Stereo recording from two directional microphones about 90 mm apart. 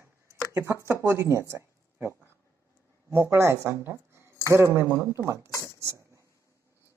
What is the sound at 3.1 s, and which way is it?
Speech, 30° right (ahead or behind).